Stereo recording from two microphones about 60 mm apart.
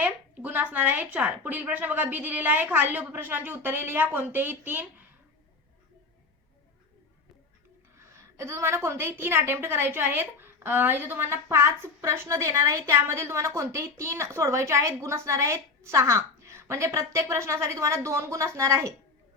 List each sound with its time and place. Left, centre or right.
0.0 s a woman's voice: right
7.9 s a woman's voice: right
11.4 s a woman's voice: right